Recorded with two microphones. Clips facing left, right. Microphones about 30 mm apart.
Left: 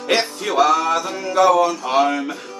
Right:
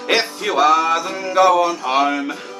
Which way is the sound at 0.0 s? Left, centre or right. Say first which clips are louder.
Right 1 dB; centre.